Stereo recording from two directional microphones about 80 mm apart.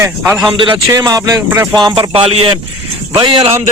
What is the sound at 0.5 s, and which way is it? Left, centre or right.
Speech, right.